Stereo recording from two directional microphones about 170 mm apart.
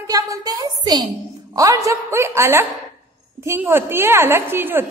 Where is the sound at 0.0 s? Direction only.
20° right (ahead or behind).